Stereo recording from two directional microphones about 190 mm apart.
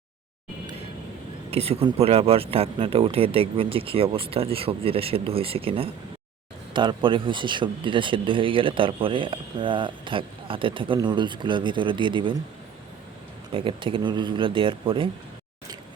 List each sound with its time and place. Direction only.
1.5 s speech: 30° right (ahead or behind)
13.5 s speech: 25° right (ahead or behind)